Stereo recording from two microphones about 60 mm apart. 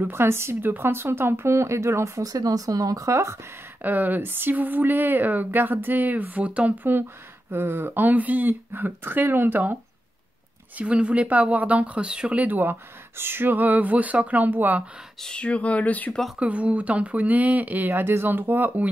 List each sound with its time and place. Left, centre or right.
0.0 s speech: right
3.8 s speech: right
10.8 s speech: centre
12.4 s speech: right
15.2 s speech: centre
16.3 s speech: right
17.8 s speech: right